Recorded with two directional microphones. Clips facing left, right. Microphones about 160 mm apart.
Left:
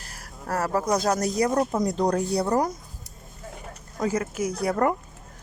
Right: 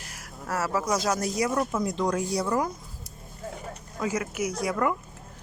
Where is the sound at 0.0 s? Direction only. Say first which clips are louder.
Left 1 dB; 40° left (ahead or behind).